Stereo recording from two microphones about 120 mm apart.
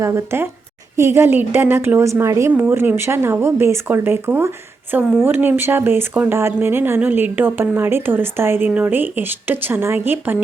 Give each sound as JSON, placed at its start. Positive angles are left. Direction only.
{"t": 0.0, "sound": "a woman's voice", "side_deg": -20}